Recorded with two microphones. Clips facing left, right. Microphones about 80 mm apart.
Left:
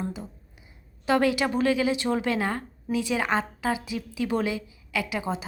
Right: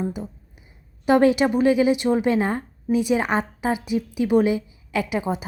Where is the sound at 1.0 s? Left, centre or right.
Right.